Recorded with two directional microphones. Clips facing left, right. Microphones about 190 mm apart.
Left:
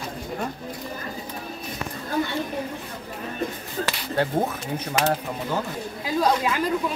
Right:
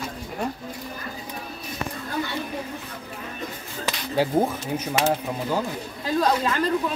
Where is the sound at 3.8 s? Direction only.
5° right (ahead or behind).